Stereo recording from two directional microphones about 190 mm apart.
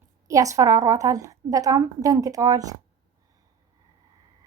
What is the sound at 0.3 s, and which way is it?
Speech, 15° right (ahead or behind).